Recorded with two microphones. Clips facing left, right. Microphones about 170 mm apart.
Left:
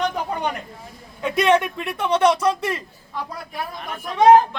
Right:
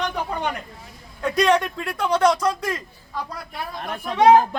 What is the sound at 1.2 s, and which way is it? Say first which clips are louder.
Speech: left 1 dB; 10° left (ahead or behind).